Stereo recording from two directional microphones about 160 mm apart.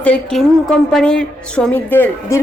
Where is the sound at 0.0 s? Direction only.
5° left (ahead or behind).